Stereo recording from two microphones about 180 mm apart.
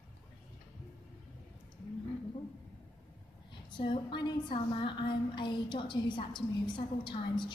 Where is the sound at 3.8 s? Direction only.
30° left (ahead or behind).